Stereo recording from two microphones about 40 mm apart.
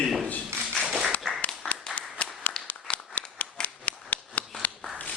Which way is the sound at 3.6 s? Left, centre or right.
Left.